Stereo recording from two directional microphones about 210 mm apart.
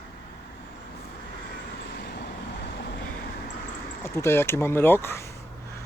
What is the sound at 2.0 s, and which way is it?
Vehicle, 50° left (ahead or behind).